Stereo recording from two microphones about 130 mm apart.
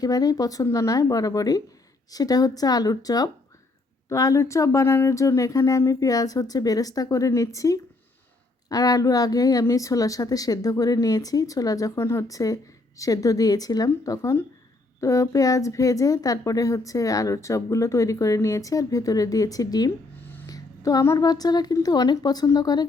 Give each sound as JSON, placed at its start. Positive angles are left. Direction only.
{"t": 0.0, "sound": "speech", "side_deg": 30}